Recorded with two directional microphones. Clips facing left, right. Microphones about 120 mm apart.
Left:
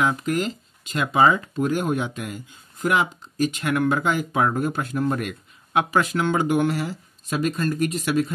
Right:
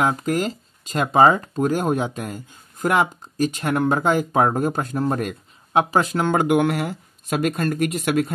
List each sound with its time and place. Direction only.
0.0 s speech: 35° right (ahead or behind)
6.4 s speech: 65° right (ahead or behind)